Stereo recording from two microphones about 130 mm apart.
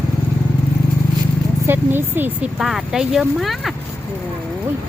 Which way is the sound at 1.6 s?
15° right (ahead or behind).